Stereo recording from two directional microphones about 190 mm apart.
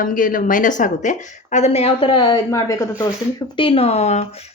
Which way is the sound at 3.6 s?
30° left (ahead or behind).